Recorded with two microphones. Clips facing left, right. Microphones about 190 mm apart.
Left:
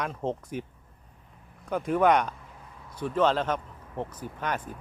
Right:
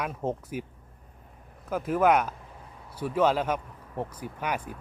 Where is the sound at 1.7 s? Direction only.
5° right (ahead or behind).